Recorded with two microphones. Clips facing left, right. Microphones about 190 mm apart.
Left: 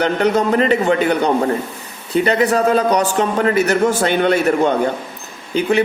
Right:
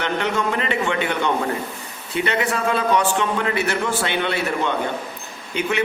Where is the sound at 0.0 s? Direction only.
40° left (ahead or behind).